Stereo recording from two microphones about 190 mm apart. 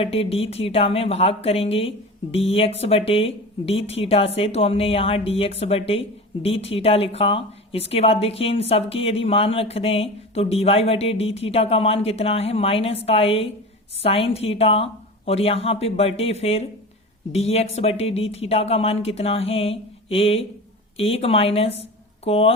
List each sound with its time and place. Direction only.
0.0 s speech: 30° left (ahead or behind)